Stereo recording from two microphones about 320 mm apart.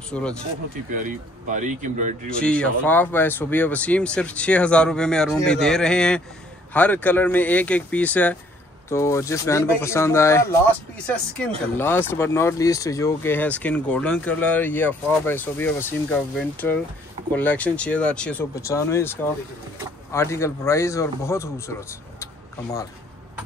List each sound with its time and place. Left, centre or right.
0.1 s speech: centre
0.9 s speech: right
2.2 s a man's voice: centre
11.7 s a man's voice: centre
22.2 s vehicle: centre